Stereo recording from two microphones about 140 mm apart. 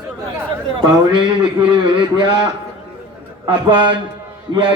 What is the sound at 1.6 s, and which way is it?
Speech, 35° right (ahead or behind).